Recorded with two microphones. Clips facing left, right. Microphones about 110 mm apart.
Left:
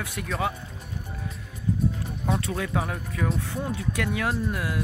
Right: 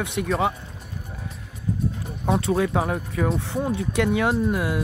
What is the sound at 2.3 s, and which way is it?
Speech, 30° right (ahead or behind).